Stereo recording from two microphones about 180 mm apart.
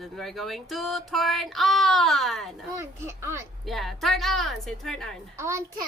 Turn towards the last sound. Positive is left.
turn(degrees=-15)  # may be behind; listen again after turning